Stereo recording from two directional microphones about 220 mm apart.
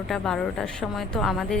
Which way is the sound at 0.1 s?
Centre (ahead or behind).